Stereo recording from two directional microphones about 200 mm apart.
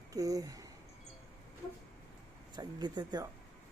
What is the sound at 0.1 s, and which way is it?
Speech, 15° right (ahead or behind).